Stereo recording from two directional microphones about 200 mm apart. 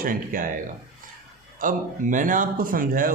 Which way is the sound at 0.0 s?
45° right (ahead or behind).